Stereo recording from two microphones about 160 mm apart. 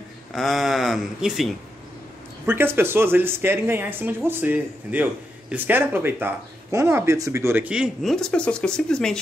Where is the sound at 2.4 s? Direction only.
15° right (ahead or behind).